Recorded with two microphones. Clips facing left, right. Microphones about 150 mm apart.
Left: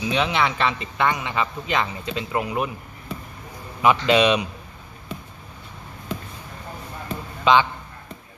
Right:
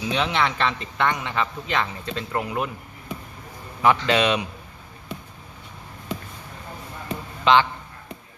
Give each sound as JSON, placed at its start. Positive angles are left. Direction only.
{"t": 0.0, "sound": "a man's voice", "side_deg": 0}
{"t": 3.8, "sound": "a man's voice", "side_deg": 15}
{"t": 7.4, "sound": "a man's voice", "side_deg": 15}